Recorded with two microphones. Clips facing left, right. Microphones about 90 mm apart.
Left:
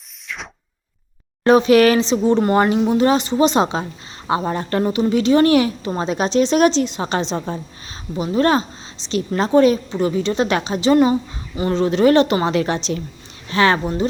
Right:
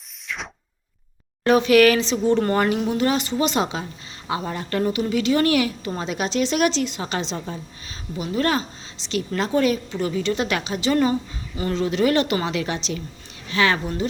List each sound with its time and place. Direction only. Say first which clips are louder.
1.5 s a woman's voice: left 3 dB; 25° left (ahead or behind)